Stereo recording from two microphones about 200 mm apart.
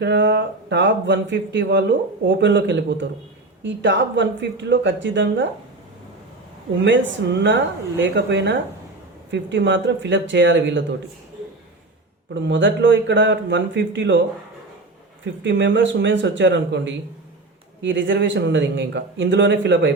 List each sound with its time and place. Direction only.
0.0 s speech: 60° right (ahead or behind)
6.8 s speech: 65° right (ahead or behind)
12.3 s speech: 65° right (ahead or behind)
15.4 s speech: 65° right (ahead or behind)